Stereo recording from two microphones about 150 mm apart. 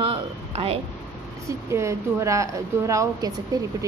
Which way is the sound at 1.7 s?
20° right (ahead or behind).